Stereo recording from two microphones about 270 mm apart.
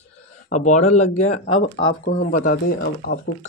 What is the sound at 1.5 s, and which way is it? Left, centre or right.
Speech, left.